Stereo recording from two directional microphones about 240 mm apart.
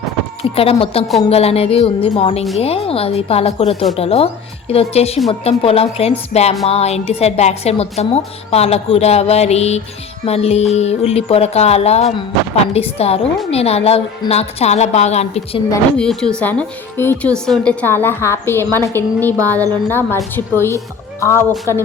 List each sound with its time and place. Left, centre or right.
0.5 s a woman's voice: left
15.7 s a woman's voice: centre